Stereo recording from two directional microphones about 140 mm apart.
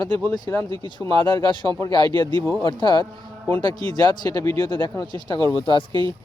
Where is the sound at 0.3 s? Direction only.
25° left (ahead or behind).